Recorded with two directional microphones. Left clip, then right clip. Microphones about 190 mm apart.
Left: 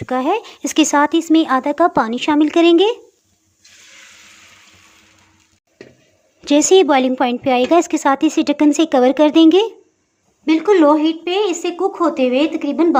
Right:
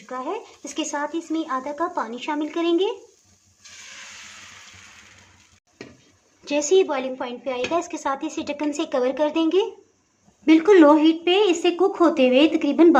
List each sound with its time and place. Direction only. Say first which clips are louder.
0.0 s speech: left 12 dB; 55° left (ahead or behind)
6.4 s a woman's voice: left 8 dB; 40° left (ahead or behind)
10.4 s a woman's voice: left 1 dB; 10° left (ahead or behind)